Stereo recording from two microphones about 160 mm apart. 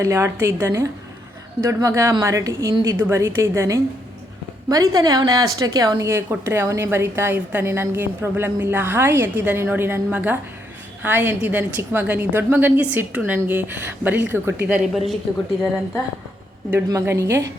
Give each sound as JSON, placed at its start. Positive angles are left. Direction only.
{"t": 0.0, "sound": "a woman's voice", "side_deg": -20}
{"t": 14.7, "sound": "a woman's voice", "side_deg": 0}
{"t": 16.7, "sound": "a woman's voice", "side_deg": -15}